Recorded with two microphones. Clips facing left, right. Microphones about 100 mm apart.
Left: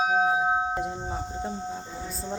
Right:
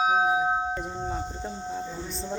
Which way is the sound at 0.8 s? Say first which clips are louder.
Even; 10° left (ahead or behind).